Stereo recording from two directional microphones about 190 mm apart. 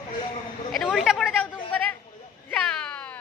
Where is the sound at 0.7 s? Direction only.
Centre (ahead or behind).